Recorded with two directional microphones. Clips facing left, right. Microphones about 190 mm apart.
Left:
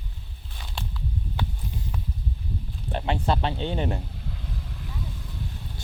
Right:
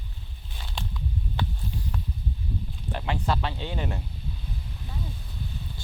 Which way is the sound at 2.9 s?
30° left (ahead or behind).